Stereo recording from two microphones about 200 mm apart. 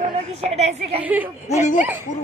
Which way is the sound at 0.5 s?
35° right (ahead or behind).